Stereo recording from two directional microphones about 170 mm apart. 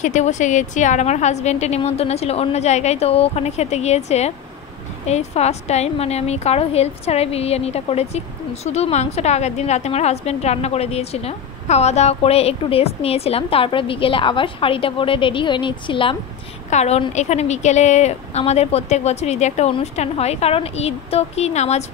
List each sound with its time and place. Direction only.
0.0 s a woman's voice: 45° left (ahead or behind)